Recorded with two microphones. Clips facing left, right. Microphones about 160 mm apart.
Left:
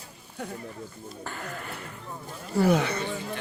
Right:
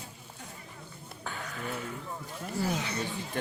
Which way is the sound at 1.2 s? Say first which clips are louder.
Left 1 dB; centre (ahead or behind).